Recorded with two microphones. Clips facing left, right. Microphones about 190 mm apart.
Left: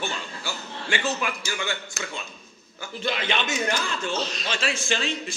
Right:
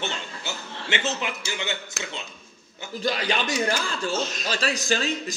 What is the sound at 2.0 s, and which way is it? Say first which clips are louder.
Speech: even; 60° right (ahead or behind).